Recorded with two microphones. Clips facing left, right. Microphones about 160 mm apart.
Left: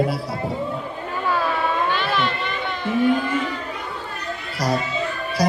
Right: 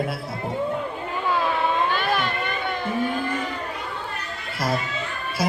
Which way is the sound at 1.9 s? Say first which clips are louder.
Left 1 dB; 45° right (ahead or behind).